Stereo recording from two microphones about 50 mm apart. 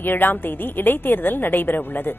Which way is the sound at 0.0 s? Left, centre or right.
Left.